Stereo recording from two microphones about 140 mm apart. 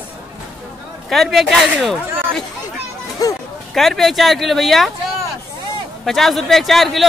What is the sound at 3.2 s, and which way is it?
Speech, 25° left (ahead or behind).